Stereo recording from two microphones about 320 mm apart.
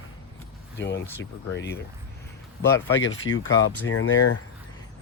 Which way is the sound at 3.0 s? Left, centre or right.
Left.